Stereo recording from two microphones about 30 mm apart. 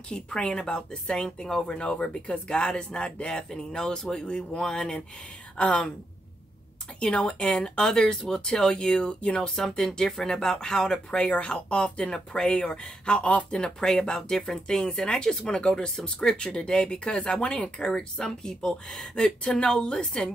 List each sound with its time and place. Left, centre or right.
0.1 s speech: left
5.6 s a woman's voice: left
7.0 s speech: left
9.8 s speech: centre
11.1 s speech: left
13.5 s speech: left
17.6 s speech: left